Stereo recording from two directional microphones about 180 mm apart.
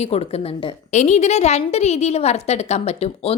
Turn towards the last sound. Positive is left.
turn(degrees=35)  # may be behind; listen again after turning